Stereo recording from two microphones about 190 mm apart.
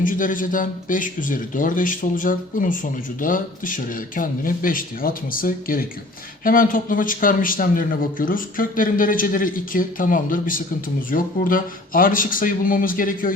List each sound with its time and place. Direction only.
0.0 s speech: 45° left (ahead or behind)